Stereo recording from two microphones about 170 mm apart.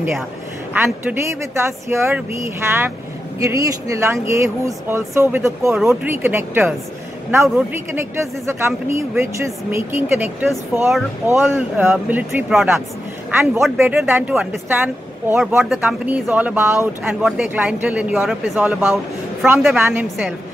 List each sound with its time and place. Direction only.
0.7 s speech: 15° right (ahead or behind)
13.7 s a woman's voice: 10° right (ahead or behind)